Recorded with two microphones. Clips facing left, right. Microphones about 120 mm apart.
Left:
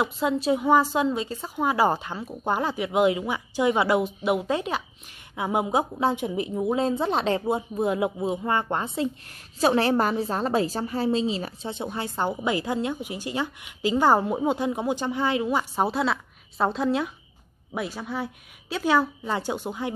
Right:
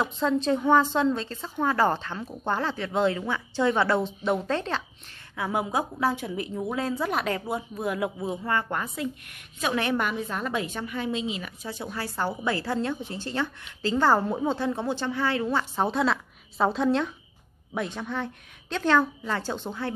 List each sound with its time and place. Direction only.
0.0 s a woman's voice: 10° left (ahead or behind)